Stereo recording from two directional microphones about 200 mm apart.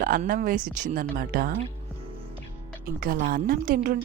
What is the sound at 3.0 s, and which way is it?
Speech, 45° right (ahead or behind).